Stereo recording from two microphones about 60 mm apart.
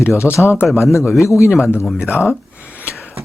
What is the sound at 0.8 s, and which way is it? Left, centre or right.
Speech, left.